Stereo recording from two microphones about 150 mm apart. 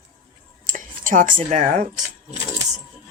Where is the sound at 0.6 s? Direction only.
60° right (ahead or behind).